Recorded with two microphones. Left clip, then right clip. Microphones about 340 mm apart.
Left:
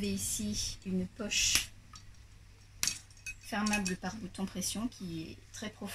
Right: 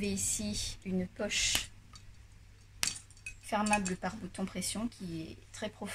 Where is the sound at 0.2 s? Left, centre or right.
Right.